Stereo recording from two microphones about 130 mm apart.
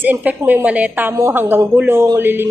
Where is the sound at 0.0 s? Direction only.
15° right (ahead or behind).